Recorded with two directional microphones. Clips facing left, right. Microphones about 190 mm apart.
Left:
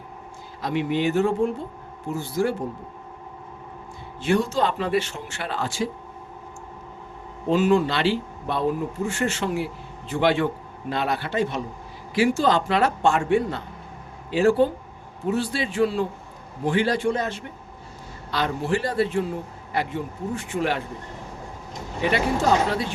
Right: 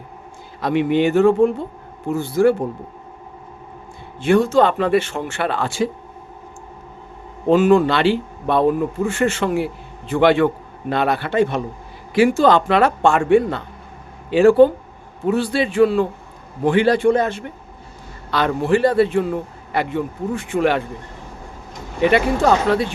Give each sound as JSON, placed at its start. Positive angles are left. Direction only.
{"t": 0.6, "sound": "speech", "side_deg": -60}
{"t": 4.2, "sound": "speech", "side_deg": -55}
{"t": 7.4, "sound": "speech", "side_deg": -50}
{"t": 22.0, "sound": "speech", "side_deg": -65}